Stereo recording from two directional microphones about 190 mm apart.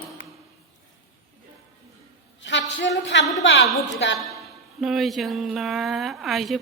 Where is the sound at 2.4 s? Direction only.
70° left (ahead or behind).